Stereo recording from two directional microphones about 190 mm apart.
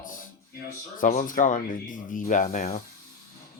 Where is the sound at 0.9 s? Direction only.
45° left (ahead or behind).